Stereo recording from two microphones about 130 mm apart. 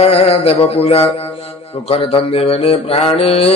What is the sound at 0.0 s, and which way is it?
Mantra, 50° left (ahead or behind).